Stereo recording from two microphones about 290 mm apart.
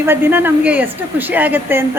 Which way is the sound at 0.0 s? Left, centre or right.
Centre.